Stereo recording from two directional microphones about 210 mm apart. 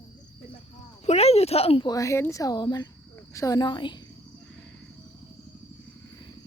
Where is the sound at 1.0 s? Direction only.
30° left (ahead or behind).